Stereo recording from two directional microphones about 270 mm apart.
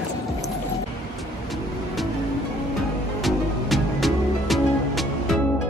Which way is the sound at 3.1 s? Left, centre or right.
Centre.